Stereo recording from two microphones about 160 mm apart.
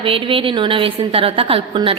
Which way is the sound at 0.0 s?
35° right (ahead or behind).